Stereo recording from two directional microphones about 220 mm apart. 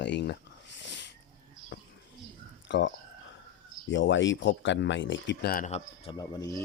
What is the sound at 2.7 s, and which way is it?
Speech, 55° left (ahead or behind).